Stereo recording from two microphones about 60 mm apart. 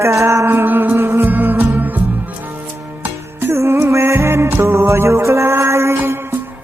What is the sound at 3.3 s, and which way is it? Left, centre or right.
Music, right.